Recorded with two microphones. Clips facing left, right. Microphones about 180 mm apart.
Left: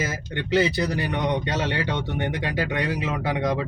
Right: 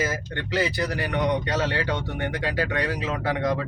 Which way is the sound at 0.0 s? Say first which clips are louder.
Right 1 dB; 20° left (ahead or behind).